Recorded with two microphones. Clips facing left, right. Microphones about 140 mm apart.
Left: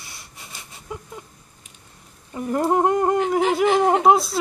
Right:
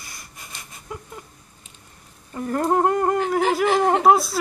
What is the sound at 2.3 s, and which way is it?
Speech, 15° left (ahead or behind).